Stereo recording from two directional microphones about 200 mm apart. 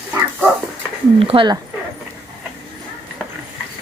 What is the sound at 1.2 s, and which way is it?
Speech, 25° right (ahead or behind).